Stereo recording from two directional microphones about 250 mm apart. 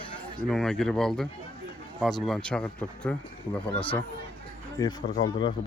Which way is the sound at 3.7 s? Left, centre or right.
Left.